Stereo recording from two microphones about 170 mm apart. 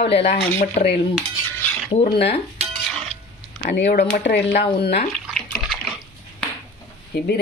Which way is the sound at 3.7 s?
65° left (ahead or behind).